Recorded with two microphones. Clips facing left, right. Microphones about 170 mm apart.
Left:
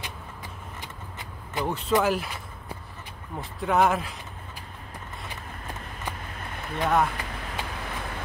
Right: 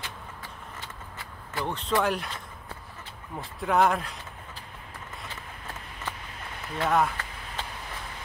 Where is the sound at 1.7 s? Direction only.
5° left (ahead or behind).